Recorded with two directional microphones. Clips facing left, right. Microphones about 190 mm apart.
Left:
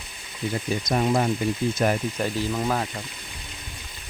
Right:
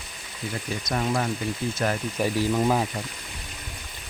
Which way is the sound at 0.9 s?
20° left (ahead or behind).